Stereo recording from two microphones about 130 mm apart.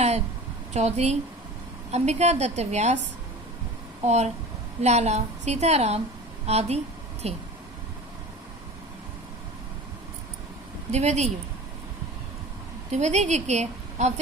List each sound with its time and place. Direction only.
0.7 s a woman's voice: 60° right (ahead or behind)
4.0 s a woman's voice: 60° right (ahead or behind)
10.9 s a woman's voice: 60° right (ahead or behind)
12.9 s a woman's voice: 60° right (ahead or behind)